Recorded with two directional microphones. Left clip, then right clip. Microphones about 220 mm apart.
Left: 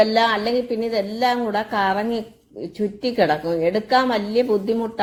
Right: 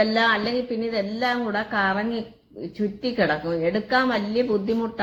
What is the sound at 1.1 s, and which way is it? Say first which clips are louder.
A woman's voice: left 4 dB; 15° left (ahead or behind).